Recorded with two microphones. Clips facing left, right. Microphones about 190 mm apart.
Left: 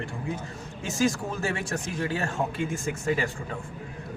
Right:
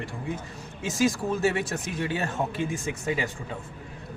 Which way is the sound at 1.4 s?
20° right (ahead or behind).